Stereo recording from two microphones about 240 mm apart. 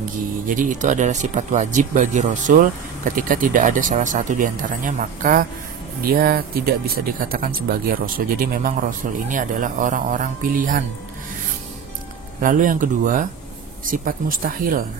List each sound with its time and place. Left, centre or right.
0.0 s speech: right
12.4 s speech: right